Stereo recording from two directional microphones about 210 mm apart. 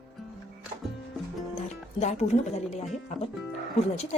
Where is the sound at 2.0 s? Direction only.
35° left (ahead or behind).